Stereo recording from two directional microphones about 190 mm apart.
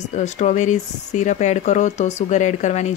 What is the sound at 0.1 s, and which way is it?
Speech, 40° left (ahead or behind).